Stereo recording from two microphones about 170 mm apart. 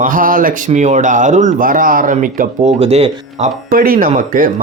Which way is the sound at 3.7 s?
60° right (ahead or behind).